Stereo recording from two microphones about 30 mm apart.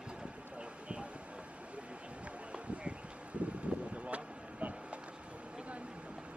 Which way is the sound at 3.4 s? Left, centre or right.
Right.